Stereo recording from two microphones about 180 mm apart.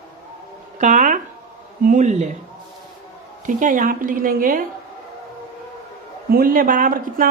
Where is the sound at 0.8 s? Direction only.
45° right (ahead or behind).